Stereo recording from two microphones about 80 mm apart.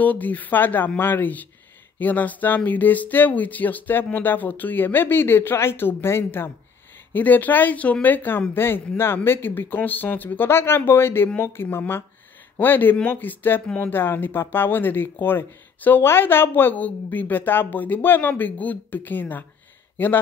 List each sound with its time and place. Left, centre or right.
0.0 s speech: centre